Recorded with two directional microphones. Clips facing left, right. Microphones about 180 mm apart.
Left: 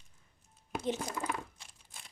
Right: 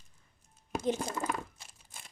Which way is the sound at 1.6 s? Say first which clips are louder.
Right 2 dB; 5° right (ahead or behind).